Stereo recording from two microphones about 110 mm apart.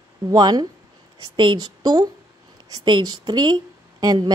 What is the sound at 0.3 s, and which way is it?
A woman's voice, 40° right (ahead or behind).